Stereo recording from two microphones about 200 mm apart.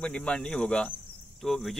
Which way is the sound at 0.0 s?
5° left (ahead or behind).